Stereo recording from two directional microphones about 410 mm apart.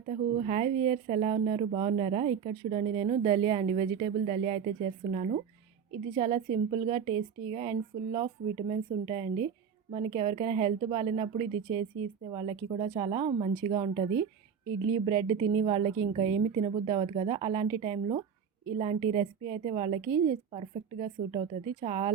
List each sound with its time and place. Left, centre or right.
0.1 s speech: centre